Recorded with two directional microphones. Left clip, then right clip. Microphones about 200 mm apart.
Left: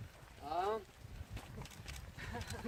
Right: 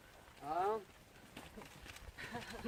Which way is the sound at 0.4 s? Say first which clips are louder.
Even; 55° left (ahead or behind).